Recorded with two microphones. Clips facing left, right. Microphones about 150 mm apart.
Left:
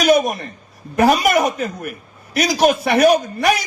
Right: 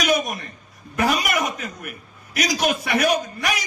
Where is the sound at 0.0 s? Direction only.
35° left (ahead or behind).